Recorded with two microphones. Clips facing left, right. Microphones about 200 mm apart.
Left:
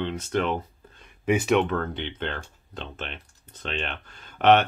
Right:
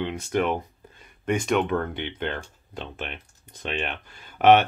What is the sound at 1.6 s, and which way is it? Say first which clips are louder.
Speech: right 1 dB; 15° right (ahead or behind).